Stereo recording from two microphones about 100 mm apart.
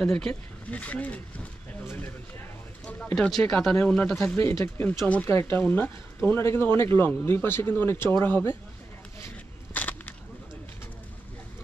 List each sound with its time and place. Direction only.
0.0 s speech: 5° left (ahead or behind)
2.8 s speech: 10° left (ahead or behind)
9.8 s a sound: 15° left (ahead or behind)